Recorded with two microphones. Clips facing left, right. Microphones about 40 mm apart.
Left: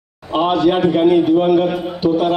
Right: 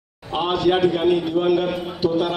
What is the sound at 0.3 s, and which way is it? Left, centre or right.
A man's voice, left.